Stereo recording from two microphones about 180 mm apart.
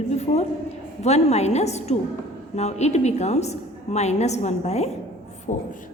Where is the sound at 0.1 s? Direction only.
40° left (ahead or behind).